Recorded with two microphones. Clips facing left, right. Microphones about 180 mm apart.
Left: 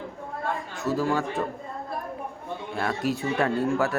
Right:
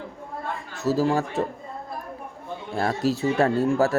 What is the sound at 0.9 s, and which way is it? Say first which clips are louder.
Speech: right 4 dB; 35° right (ahead or behind).